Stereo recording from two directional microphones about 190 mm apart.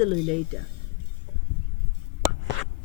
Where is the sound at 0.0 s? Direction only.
35° right (ahead or behind).